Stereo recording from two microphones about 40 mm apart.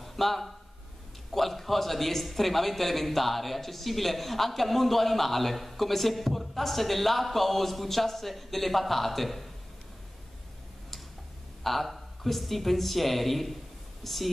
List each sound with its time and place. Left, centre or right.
0.0 s a sound: centre
1.3 s a man's voice: centre
11.6 s a man's voice: centre